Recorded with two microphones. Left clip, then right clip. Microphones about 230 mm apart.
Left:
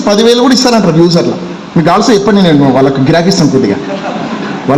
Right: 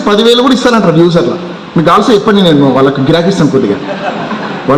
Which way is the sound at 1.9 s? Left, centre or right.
Left.